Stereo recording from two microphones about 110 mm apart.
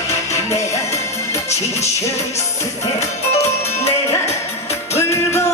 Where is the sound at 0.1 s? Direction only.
25° left (ahead or behind).